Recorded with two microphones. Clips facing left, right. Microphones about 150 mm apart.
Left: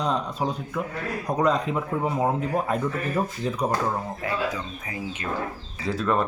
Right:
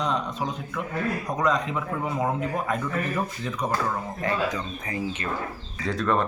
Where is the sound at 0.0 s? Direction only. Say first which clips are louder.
Left 2 dB; 35° left (ahead or behind).